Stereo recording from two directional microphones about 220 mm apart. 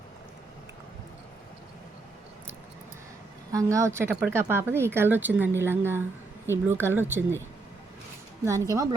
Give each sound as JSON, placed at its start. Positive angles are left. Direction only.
{"t": 3.5, "sound": "speech", "side_deg": -15}
{"t": 8.7, "sound": "speech", "side_deg": -15}